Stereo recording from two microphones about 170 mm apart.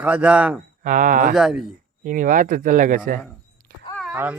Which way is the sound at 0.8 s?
50° right (ahead or behind).